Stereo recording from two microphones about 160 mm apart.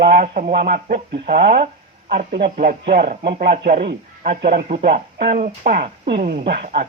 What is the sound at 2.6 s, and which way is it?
Speech, 60° right (ahead or behind).